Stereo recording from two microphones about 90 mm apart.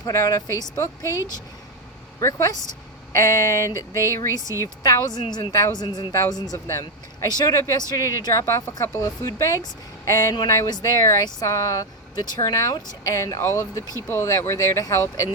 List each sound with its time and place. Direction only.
0.0 s speech: 40° left (ahead or behind)
2.2 s speech: 35° left (ahead or behind)
4.4 s a woman's voice: 35° right (ahead or behind)
4.6 s speech: 45° left (ahead or behind)
5.5 s speech: 40° left (ahead or behind)
5.7 s speech: 50° left (ahead or behind)